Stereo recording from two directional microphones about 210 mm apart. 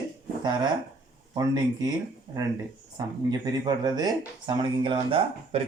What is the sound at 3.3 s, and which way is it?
Speech, 20° right (ahead or behind).